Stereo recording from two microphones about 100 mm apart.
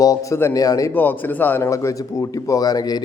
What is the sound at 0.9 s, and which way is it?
A man's voice, 20° left (ahead or behind).